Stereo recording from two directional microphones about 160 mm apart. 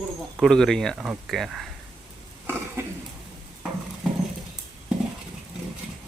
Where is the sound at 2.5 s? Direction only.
15° right (ahead or behind).